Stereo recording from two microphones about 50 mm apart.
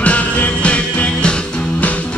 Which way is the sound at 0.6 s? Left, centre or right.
Left.